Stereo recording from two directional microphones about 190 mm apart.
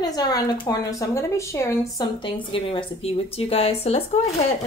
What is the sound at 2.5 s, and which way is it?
Speech, 30° left (ahead or behind).